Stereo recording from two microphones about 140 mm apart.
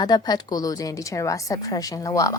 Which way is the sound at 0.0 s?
30° left (ahead or behind).